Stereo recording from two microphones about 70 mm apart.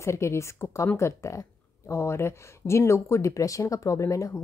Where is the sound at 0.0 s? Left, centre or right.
Left.